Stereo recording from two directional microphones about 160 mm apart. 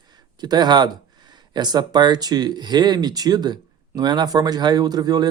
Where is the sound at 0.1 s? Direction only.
25° right (ahead or behind).